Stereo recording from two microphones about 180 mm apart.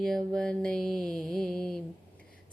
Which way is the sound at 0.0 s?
5° left (ahead or behind).